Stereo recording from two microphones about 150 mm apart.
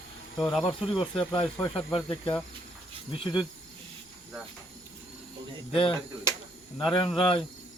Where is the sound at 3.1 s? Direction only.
35° left (ahead or behind).